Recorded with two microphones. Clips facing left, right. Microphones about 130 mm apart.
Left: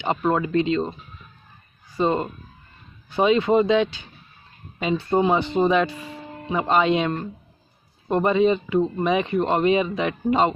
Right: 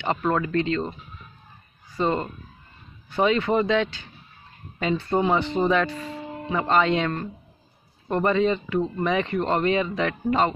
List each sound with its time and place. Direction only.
0.0 s speech: 15° left (ahead or behind)
2.0 s speech: 20° left (ahead or behind)